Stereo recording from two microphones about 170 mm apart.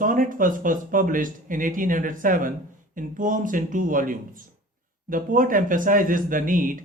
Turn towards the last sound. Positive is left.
turn(degrees=-50)  # may be behind; listen again after turning